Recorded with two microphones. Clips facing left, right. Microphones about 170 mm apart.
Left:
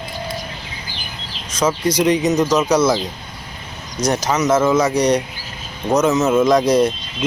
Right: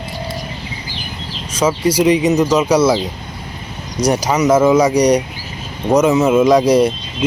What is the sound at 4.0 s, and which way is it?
Speech, 10° right (ahead or behind).